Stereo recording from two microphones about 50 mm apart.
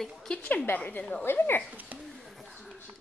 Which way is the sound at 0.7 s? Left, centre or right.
Left.